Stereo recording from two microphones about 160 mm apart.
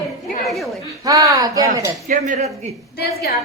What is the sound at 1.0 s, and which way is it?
Speech, 20° right (ahead or behind).